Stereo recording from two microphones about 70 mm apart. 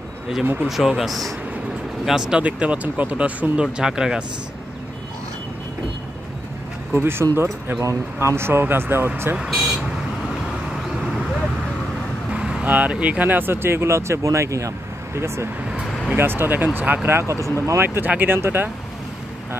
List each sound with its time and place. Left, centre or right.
0.7 s speech: centre
6.9 s speech: right
9.4 s speech: centre
12.3 s vehicle: centre
12.6 s speech: right
16.2 s speech: right
17.8 s speech: right